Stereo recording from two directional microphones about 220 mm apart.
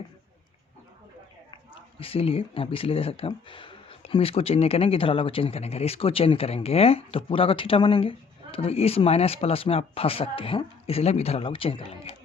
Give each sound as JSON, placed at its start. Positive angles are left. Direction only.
{"t": 1.5, "sound": "speech", "side_deg": 25}